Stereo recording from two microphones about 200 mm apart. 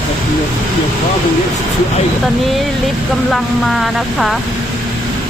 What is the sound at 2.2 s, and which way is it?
Speech, centre (ahead or behind).